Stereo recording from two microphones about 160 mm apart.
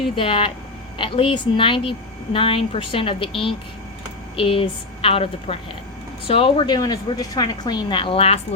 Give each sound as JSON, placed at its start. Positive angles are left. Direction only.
{"t": 0.2, "sound": "a woman's voice", "side_deg": 35}